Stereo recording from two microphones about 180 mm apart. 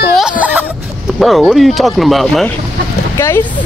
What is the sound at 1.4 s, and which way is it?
Speech, centre (ahead or behind).